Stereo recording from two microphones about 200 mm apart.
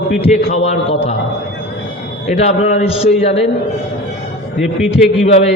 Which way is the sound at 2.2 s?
35° left (ahead or behind).